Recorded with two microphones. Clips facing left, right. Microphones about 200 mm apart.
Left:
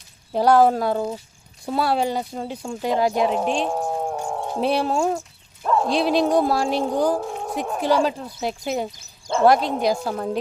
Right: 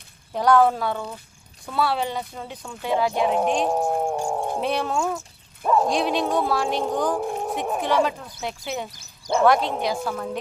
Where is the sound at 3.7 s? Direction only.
15° right (ahead or behind).